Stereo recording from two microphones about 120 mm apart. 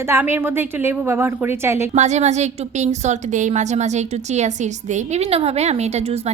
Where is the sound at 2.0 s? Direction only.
70° right (ahead or behind).